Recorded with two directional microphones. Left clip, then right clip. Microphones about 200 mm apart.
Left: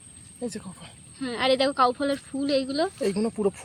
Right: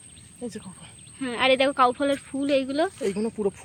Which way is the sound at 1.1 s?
5° right (ahead or behind).